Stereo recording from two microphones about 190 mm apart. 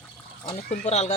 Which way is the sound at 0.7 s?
35° left (ahead or behind).